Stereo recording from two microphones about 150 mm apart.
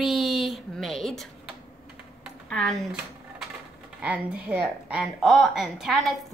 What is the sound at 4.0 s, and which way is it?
A woman's voice, 5° right (ahead or behind).